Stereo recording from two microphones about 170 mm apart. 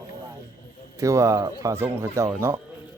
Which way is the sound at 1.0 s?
20° right (ahead or behind).